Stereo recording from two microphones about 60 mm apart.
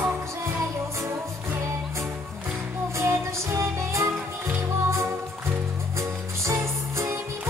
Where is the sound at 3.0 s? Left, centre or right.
Right.